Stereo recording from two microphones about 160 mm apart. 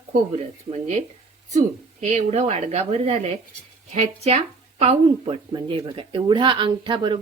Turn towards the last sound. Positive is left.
turn(degrees=-30)  # may be behind; listen again after turning